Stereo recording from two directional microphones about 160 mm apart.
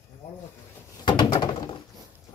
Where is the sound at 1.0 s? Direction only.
30° left (ahead or behind).